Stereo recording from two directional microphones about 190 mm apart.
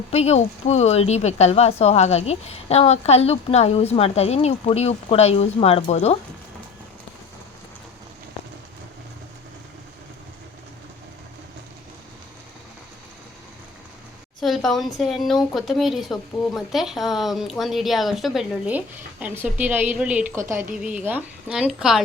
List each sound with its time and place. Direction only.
0.1 s a woman's voice: 35° left (ahead or behind)
14.4 s a sound: centre (ahead or behind)
14.9 s a woman's voice: centre (ahead or behind)